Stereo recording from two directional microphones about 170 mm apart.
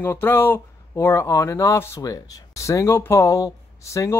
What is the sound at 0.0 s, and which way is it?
Speech, 15° left (ahead or behind).